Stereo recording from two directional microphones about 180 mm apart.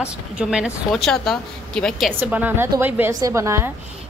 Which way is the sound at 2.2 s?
10° right (ahead or behind).